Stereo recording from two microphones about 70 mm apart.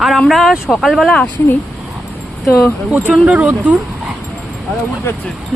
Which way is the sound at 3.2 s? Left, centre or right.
Centre.